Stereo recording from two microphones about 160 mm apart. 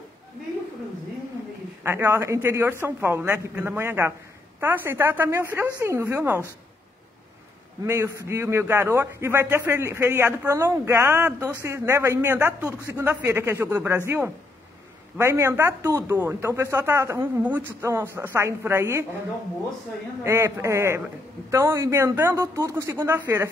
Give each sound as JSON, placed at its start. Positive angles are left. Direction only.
{"t": 1.8, "sound": "a man's voice", "side_deg": -15}
{"t": 7.8, "sound": "a man's voice", "side_deg": -15}
{"t": 20.2, "sound": "a man's voice", "side_deg": -15}